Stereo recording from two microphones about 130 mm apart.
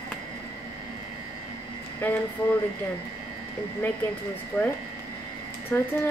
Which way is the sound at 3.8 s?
15° left (ahead or behind).